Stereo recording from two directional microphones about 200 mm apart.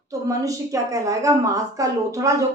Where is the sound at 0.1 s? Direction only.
15° right (ahead or behind).